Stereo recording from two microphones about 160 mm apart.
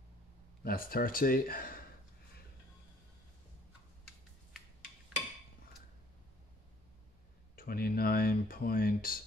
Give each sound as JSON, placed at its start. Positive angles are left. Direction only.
{"t": 0.7, "sound": "speech", "side_deg": 65}
{"t": 7.5, "sound": "speech", "side_deg": 70}